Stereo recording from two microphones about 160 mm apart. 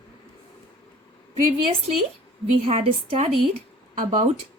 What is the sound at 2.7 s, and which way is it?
Speech, 35° right (ahead or behind).